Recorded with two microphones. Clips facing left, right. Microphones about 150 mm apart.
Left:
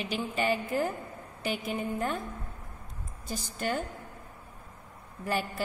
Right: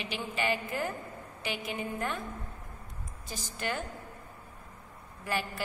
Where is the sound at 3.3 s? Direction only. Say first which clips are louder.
Left 3 dB; 45° left (ahead or behind).